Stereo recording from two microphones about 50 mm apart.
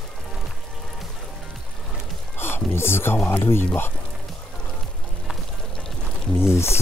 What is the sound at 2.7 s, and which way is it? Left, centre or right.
Speech, left.